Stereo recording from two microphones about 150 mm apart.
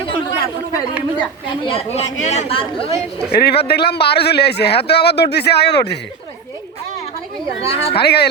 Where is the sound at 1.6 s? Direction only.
40° left (ahead or behind).